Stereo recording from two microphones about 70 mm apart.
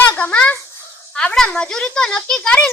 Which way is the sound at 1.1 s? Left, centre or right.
Centre.